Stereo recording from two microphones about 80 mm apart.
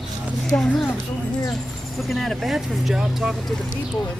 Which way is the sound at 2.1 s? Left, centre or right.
Centre.